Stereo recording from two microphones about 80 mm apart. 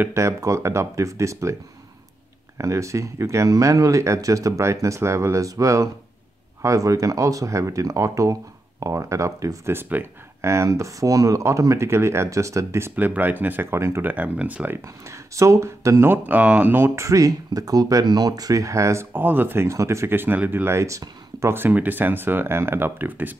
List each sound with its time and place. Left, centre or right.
0.1 s speech: right
9.7 s speech: right
10.4 s speech: right
12.9 s speech: right
14.1 s speech: centre
15.0 s speech: right
16.1 s speech: centre
16.8 s speech: right
19.1 s speech: right